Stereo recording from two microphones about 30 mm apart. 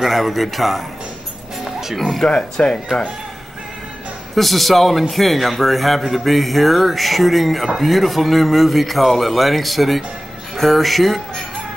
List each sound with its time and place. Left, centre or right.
0.0 s a man's voice: centre
1.6 s music: centre
2.2 s speech: left
2.6 s speech: left
4.4 s a man's voice: centre